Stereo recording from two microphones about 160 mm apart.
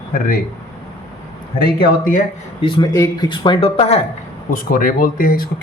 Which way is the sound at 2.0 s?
55° left (ahead or behind).